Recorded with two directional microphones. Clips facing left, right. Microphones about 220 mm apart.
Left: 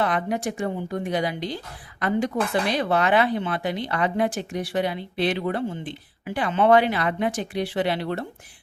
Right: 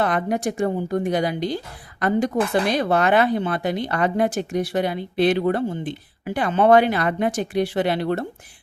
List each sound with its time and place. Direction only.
0.0 s speech: 45° right (ahead or behind)